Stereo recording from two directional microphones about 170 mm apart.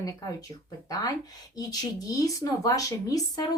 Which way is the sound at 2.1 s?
20° left (ahead or behind).